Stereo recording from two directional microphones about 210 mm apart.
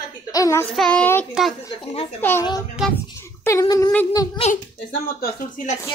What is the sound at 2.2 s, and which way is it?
Speech, 10° left (ahead or behind).